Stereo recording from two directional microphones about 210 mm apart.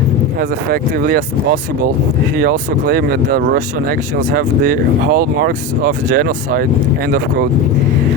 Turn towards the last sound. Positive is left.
turn(degrees=-45)  # may be behind; listen again after turning